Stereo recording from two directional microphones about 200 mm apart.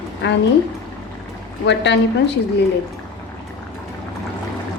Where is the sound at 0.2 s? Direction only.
60° left (ahead or behind).